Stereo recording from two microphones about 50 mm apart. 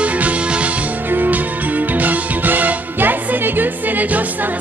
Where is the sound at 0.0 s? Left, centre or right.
Right.